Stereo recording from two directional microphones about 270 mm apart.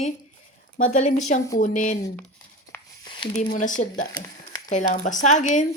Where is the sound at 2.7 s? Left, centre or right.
Centre.